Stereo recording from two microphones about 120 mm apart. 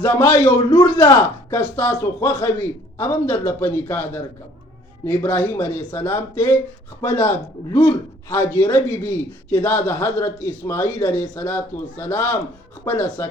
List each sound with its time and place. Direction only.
0.4 s a man's voice: 35° left (ahead or behind)
0.9 s a man's voice: 25° left (ahead or behind)